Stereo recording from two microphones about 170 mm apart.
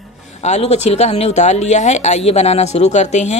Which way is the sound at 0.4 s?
40° left (ahead or behind).